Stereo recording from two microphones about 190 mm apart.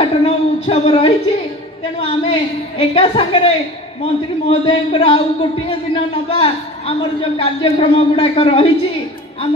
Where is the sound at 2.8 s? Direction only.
30° left (ahead or behind).